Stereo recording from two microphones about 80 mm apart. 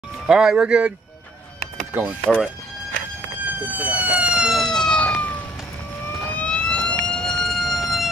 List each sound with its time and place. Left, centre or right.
0.3 s speech: centre
2.3 s speech: centre
3.6 s speech: centre
4.6 s police car: centre
6.2 s vehicle: centre
7.1 s emergency vehicle: centre